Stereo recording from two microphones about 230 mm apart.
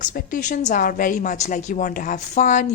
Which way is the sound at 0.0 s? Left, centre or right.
Left.